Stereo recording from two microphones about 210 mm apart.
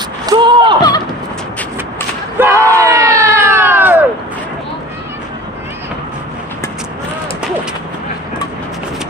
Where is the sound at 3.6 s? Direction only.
10° right (ahead or behind).